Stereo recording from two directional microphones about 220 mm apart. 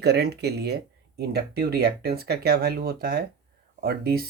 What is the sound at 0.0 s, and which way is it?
Speech, 50° right (ahead or behind).